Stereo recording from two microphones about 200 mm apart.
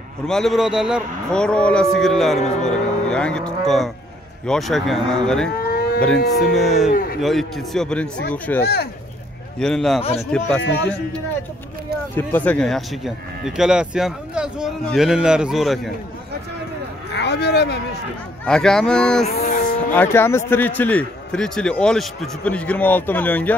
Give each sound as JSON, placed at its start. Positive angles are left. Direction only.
{"t": 0.3, "sound": "speech", "side_deg": 0}
{"t": 5.6, "sound": "a sound", "side_deg": 50}
{"t": 6.1, "sound": "speech", "side_deg": 50}
{"t": 6.5, "sound": "speech", "side_deg": 0}
{"t": 6.9, "sound": "speech", "side_deg": 45}
{"t": 7.2, "sound": "a man's voice", "side_deg": 0}
{"t": 12.2, "sound": "speech", "side_deg": 10}
{"t": 17.1, "sound": "speech", "side_deg": 55}
{"t": 18.4, "sound": "speech", "side_deg": 5}
{"t": 19.3, "sound": "livestock", "side_deg": 45}
{"t": 19.9, "sound": "a man's voice", "side_deg": 10}